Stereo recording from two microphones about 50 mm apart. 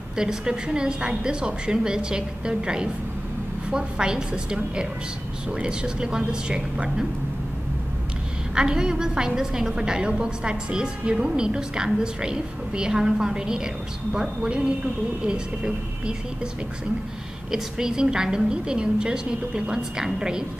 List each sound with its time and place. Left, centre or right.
0.2 s a woman's voice: centre
5.6 s a woman's voice: centre
8.5 s a woman's voice: centre
17.5 s a woman's voice: centre